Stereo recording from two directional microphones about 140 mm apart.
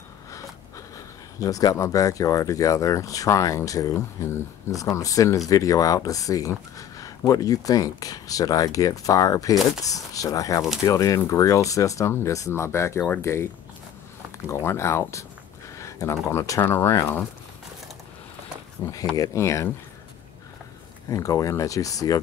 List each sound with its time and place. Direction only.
0.9 s speech: 25° left (ahead or behind)
15.8 s a sound: 20° left (ahead or behind)
16.3 s speech: 20° left (ahead or behind)
18.8 s speech: 20° left (ahead or behind)
21.1 s speech: 25° left (ahead or behind)